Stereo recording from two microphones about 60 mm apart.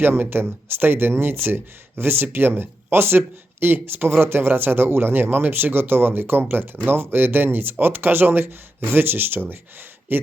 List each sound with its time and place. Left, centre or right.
0.0 s speech: right